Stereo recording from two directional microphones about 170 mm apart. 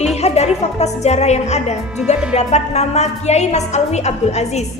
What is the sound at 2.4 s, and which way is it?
A woman's voice, 40° left (ahead or behind).